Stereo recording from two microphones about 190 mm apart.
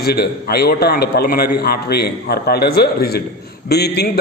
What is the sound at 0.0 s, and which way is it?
A man's voice, 55° left (ahead or behind).